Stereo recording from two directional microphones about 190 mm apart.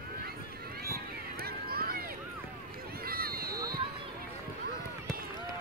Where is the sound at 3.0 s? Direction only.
50° right (ahead or behind).